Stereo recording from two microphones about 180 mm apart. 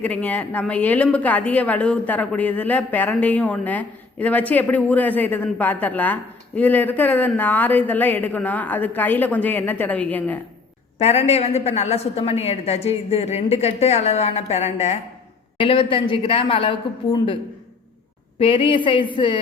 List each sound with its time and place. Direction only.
0.0 s a woman's voice: 10° left (ahead or behind)
10.9 s a woman's voice: 35° left (ahead or behind)
18.3 s speech: 30° left (ahead or behind)